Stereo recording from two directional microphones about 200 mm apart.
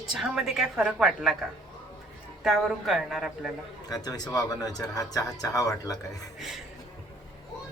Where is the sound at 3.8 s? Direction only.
20° left (ahead or behind).